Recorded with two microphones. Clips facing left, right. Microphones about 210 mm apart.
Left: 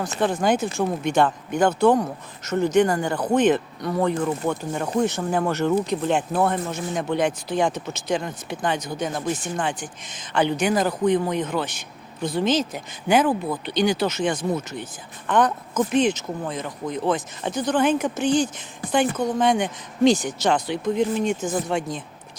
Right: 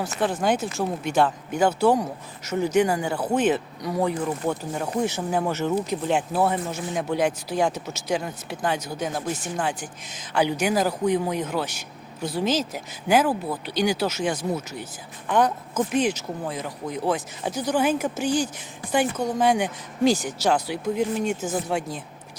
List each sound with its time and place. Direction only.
0.2 s speech: centre (ahead or behind)